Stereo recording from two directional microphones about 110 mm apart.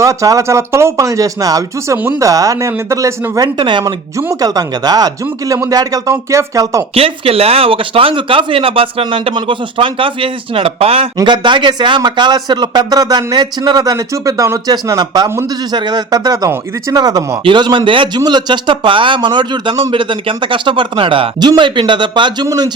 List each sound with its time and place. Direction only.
0.0 s a man's voice: 30° right (ahead or behind)
3.4 s speech: 45° right (ahead or behind)
4.2 s a man's voice: 30° right (ahead or behind)
6.9 s speech: 60° right (ahead or behind)
11.2 s a man's voice: 45° right (ahead or behind)